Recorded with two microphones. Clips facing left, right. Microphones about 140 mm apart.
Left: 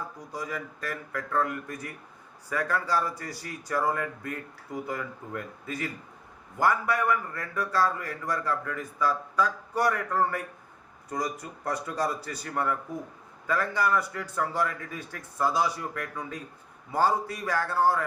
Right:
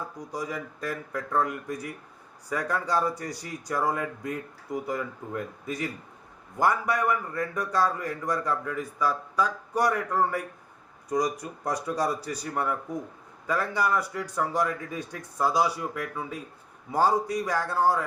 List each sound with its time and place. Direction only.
0.3 s a man's voice: 15° right (ahead or behind)